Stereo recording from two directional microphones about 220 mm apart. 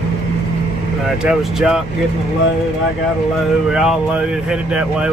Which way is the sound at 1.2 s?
5° right (ahead or behind).